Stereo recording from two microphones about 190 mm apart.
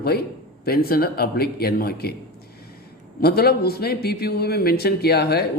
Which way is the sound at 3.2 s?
55° left (ahead or behind).